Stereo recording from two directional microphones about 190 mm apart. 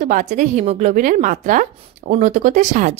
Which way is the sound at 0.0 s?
40° right (ahead or behind).